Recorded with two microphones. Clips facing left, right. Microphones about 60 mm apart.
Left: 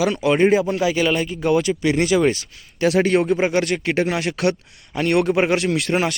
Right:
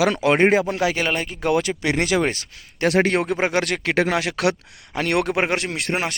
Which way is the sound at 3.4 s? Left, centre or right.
Right.